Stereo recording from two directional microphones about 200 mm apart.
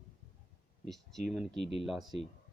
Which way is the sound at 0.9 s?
Centre (ahead or behind).